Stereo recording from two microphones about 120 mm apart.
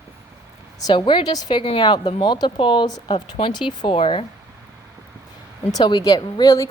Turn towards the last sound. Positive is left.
turn(degrees=30)  # may be behind; listen again after turning